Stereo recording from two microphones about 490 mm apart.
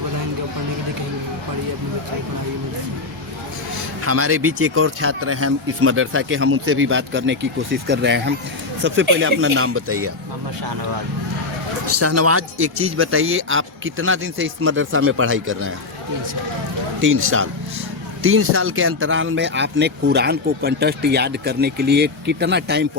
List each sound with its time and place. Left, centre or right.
4.0 s speech: right
11.9 s speech: right
17.0 s speech: right